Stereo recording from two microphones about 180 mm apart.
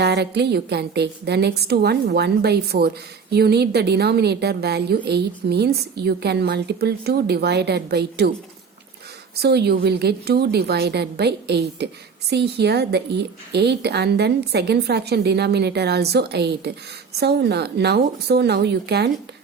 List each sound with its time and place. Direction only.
0.0 s a woman's voice: 70° right (ahead or behind)
9.3 s a woman's voice: 65° right (ahead or behind)